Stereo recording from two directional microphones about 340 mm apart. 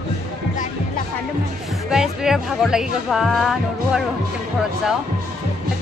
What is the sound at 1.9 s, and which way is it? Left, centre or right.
Speech, centre.